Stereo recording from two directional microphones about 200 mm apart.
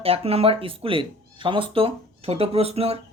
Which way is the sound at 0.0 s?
30° right (ahead or behind).